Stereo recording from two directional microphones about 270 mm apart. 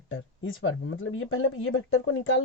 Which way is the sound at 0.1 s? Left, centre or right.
Left.